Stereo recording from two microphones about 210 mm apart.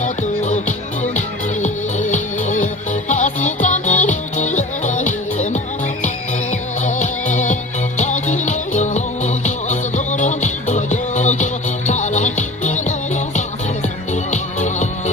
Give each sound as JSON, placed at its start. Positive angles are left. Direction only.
{"t": 0.0, "sound": "music", "side_deg": 35}
{"t": 1.6, "sound": "music", "side_deg": 35}
{"t": 6.5, "sound": "music", "side_deg": 35}
{"t": 14.1, "sound": "music", "side_deg": 35}